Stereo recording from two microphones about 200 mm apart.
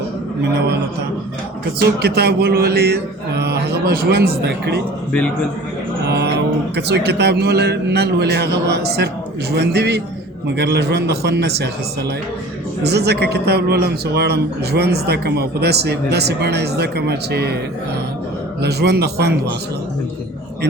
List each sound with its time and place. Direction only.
2.0 s mantra: 50° right (ahead or behind)
6.1 s a sound: 60° right (ahead or behind)
6.7 s a man's voice: 55° right (ahead or behind)
12.8 s a man's voice: 55° right (ahead or behind)
18.6 s a man's voice: 55° right (ahead or behind)